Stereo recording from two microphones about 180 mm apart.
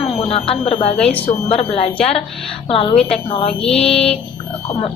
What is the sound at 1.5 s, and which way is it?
Speech, 40° left (ahead or behind).